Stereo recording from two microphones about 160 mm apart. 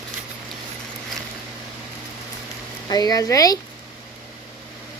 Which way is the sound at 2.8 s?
25° left (ahead or behind).